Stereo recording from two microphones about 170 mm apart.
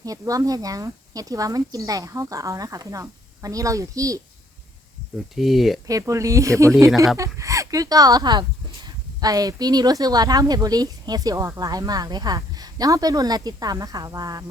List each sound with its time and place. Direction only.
0.0 s speech: 20° right (ahead or behind)
5.3 s speech: centre (ahead or behind)
5.9 s speech: 20° right (ahead or behind)